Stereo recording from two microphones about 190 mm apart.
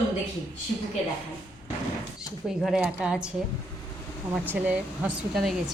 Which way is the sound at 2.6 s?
5° right (ahead or behind).